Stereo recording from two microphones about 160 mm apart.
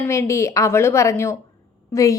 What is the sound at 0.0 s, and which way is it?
A woman's voice, 20° left (ahead or behind).